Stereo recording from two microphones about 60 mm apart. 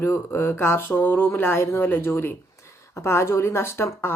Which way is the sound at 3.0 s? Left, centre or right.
Left.